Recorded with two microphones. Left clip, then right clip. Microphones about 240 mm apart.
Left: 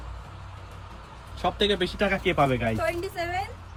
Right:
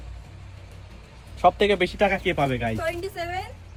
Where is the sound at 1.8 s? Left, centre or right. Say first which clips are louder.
Right 5 dB; centre.